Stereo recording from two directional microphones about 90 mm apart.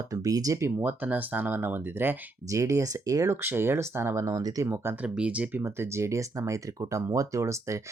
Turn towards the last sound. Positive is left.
turn(degrees=-35)  # may be behind; listen again after turning